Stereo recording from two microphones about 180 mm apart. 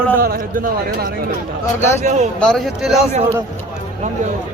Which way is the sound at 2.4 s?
Centre (ahead or behind).